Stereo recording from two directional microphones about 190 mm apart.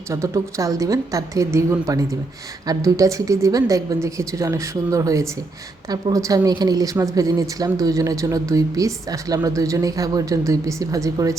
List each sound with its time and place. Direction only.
0.1 s a woman's voice: 15° right (ahead or behind)